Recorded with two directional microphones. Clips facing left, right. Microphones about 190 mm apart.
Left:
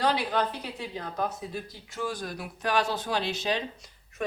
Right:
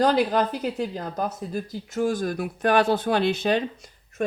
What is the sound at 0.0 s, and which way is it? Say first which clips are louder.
Speech: right 6 dB; 45° right (ahead or behind).